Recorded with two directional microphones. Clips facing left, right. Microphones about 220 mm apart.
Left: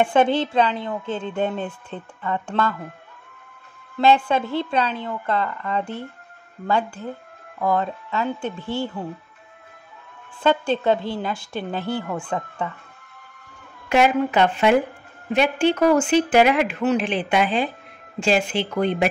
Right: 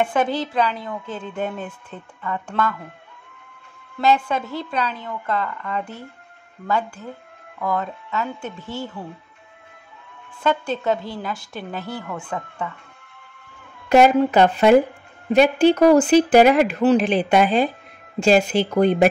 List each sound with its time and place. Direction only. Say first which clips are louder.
0.0 s speech: left 3 dB; 25° left (ahead or behind)
4.0 s speech: left 2 dB; 30° left (ahead or behind)
7.6 s speech: left 3 dB; 30° left (ahead or behind)
10.4 s speech: left 2 dB; 30° left (ahead or behind)
13.8 s speech: right 4 dB; 40° right (ahead or behind)